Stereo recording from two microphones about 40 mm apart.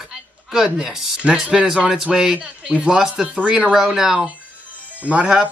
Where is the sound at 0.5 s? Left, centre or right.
Centre.